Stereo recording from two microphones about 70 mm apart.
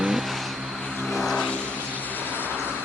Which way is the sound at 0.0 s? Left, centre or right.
Centre.